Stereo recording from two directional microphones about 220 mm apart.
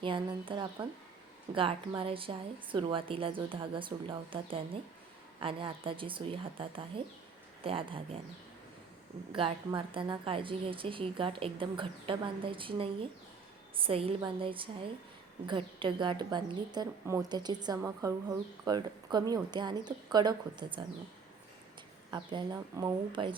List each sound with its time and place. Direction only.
0.0 s a woman's voice: 20° right (ahead or behind)
9.3 s a woman's voice: 25° right (ahead or behind)
22.1 s a woman's voice: 20° right (ahead or behind)